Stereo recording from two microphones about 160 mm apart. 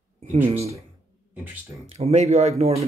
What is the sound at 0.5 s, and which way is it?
Speech, 40° right (ahead or behind).